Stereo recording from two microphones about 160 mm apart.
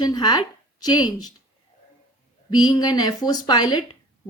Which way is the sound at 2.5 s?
25° left (ahead or behind).